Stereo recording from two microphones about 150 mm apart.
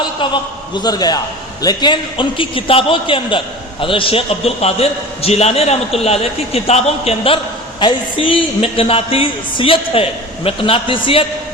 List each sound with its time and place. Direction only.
0.8 s a man's voice: 25° left (ahead or behind); by 7.3 s 45° left (ahead or behind)
7.8 s a man's voice: 35° left (ahead or behind)